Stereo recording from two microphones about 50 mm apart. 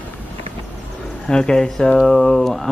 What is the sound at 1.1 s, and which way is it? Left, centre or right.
Speech, centre.